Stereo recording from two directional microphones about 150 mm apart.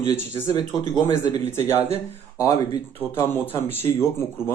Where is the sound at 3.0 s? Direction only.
15° left (ahead or behind).